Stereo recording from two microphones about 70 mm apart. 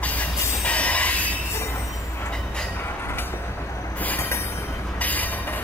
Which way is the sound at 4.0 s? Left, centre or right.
Left.